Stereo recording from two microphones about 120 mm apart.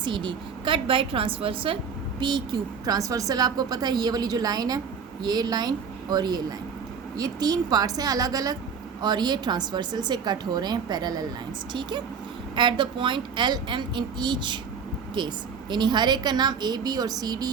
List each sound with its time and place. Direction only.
0.0 s a woman's voice: 40° right (ahead or behind)
15.7 s a woman's voice: 35° right (ahead or behind)